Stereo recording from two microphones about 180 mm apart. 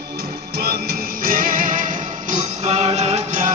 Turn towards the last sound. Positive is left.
turn(degrees=-40)  # may be behind; listen again after turning